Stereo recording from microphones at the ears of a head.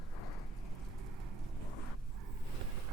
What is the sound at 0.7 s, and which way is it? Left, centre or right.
Vehicle, right.